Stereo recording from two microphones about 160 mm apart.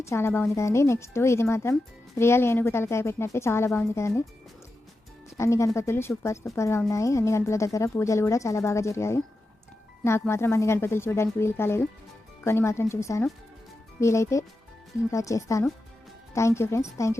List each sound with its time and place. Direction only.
0.0 s speech: 15° left (ahead or behind)
5.4 s speech: 20° left (ahead or behind)